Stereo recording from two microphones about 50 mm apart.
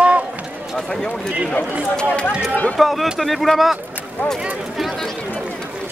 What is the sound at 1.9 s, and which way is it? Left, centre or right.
Speech, left.